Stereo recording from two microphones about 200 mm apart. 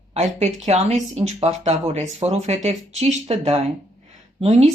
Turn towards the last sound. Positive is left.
turn(degrees=-35)  # may be behind; listen again after turning